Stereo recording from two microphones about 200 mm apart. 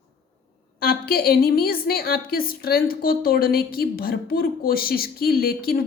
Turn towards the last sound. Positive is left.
turn(degrees=50)  # may be behind; listen again after turning